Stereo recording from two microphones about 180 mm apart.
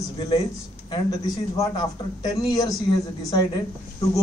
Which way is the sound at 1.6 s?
20° left (ahead or behind).